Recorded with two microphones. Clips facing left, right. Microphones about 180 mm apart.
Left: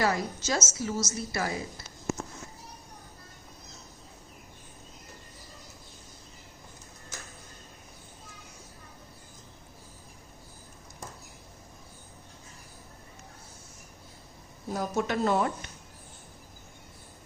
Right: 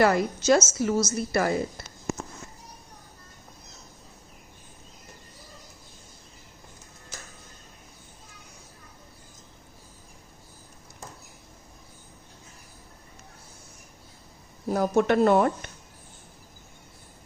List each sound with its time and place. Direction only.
0.0 s a woman's voice: 60° right (ahead or behind)
14.7 s a woman's voice: 60° right (ahead or behind)